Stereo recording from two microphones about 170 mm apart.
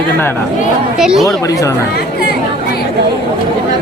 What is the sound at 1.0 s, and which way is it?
Speech, 5° right (ahead or behind).